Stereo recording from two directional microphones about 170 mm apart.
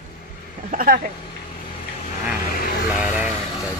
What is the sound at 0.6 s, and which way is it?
Speech, 60° right (ahead or behind).